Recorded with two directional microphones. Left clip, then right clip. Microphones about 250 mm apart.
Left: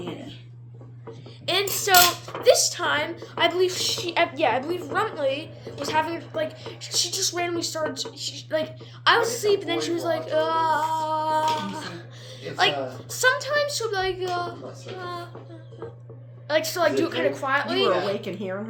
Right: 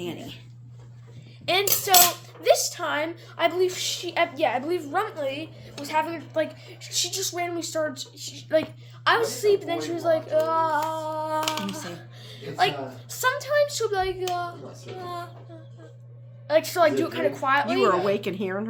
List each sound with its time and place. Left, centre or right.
1.5 s a child's voice: centre
11.8 s music: centre
12.5 s a woman's voice: centre
16.5 s a woman's voice: centre
18.1 s a woman's voice: centre